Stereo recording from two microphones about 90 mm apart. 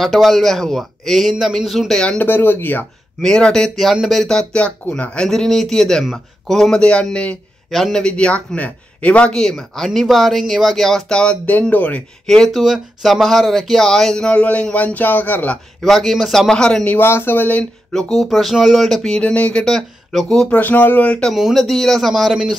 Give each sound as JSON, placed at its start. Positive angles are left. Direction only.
{"t": 0.0, "sound": "speech", "side_deg": 0}
{"t": 2.1, "sound": "speech", "side_deg": 20}
{"t": 3.2, "sound": "a man's voice", "side_deg": 5}
{"t": 12.3, "sound": "a man's voice", "side_deg": 0}
{"t": 15.8, "sound": "speech", "side_deg": 0}
{"t": 17.0, "sound": "speech", "side_deg": 25}
{"t": 20.5, "sound": "speech", "side_deg": 20}
{"t": 21.3, "sound": "speech", "side_deg": 0}